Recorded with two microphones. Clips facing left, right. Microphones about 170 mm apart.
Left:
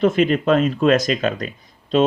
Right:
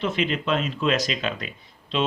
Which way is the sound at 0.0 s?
45° left (ahead or behind).